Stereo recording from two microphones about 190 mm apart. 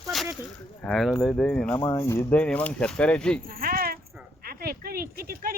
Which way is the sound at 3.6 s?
50° right (ahead or behind).